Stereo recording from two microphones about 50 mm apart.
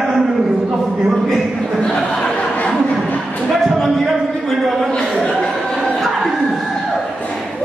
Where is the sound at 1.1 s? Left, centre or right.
Centre.